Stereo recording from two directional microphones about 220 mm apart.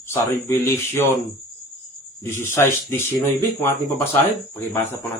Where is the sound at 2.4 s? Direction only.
10° left (ahead or behind).